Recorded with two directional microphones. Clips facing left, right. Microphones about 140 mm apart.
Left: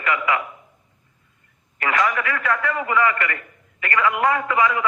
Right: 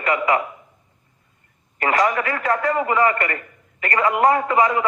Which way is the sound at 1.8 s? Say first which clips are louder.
Right 3 dB; 35° right (ahead or behind).